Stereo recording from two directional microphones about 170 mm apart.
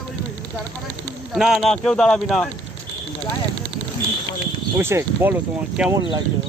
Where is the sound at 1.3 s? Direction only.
Centre (ahead or behind).